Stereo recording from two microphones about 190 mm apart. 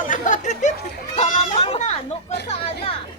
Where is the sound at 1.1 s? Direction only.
35° left (ahead or behind).